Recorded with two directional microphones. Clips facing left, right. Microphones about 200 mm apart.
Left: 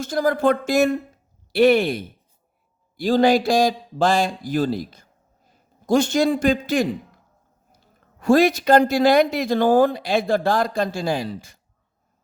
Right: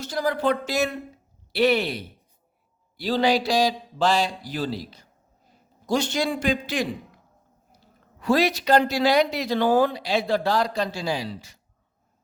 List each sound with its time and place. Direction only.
0.0 s a man's voice: 50° left (ahead or behind)
8.2 s speech: 50° left (ahead or behind)